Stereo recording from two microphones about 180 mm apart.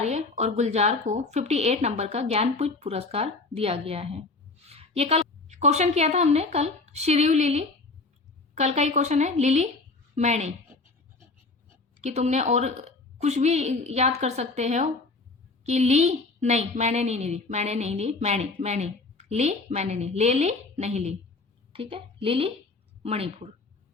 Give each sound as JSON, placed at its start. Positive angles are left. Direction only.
{"t": 0.0, "sound": "a woman's voice", "side_deg": -40}
{"t": 12.0, "sound": "a woman's voice", "side_deg": -40}